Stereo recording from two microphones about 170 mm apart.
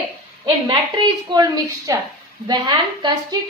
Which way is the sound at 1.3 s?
20° right (ahead or behind).